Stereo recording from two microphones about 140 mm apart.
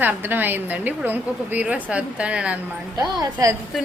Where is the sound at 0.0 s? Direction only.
15° right (ahead or behind).